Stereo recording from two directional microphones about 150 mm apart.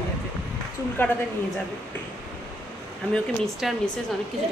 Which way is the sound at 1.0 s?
15° left (ahead or behind).